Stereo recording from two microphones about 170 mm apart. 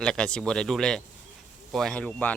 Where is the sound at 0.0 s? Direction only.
5° left (ahead or behind).